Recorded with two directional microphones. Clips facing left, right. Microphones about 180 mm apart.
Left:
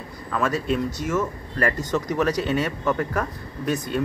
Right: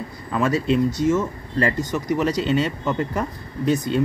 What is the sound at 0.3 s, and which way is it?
Speech, 25° right (ahead or behind).